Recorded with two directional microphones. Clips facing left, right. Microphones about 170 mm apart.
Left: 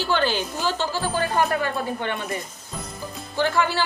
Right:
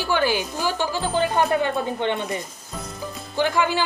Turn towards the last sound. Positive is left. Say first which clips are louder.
# right 1 dB
turn(degrees=-15)  # may be behind; listen again after turning